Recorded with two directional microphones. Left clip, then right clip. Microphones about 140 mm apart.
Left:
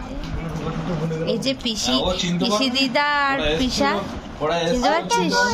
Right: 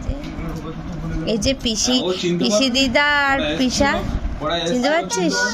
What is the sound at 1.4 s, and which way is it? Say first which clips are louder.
Speech: right 3 dB; 15° right (ahead or behind).